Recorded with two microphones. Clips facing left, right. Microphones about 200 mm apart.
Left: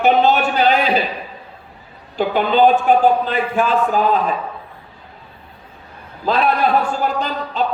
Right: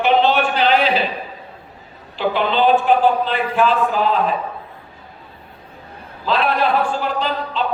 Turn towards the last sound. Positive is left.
turn(degrees=45)  # may be behind; listen again after turning